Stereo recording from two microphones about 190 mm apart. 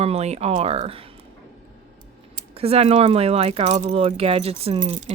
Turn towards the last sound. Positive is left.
turn(degrees=-40)  # may be behind; listen again after turning